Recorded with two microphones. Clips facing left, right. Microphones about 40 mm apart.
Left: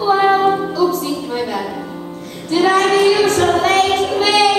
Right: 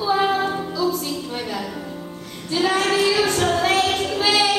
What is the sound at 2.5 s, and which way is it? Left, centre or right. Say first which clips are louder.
Child singing: left 7 dB; centre.